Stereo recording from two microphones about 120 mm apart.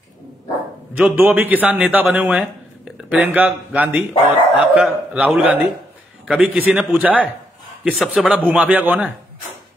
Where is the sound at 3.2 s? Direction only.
15° right (ahead or behind).